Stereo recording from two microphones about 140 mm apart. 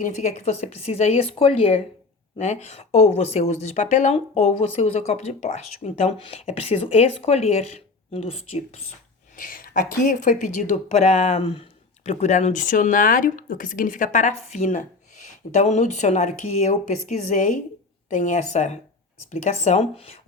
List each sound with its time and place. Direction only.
0.0 s speech: 55° left (ahead or behind)
2.4 s speech: 55° left (ahead or behind)
9.3 s speech: 85° left; by 20.1 s 50° left (ahead or behind)